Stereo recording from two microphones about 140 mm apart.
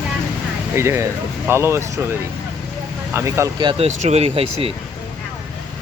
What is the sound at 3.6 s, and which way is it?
Speech, 35° right (ahead or behind).